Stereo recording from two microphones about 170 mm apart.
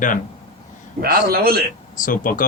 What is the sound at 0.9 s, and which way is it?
Speech, 60° right (ahead or behind).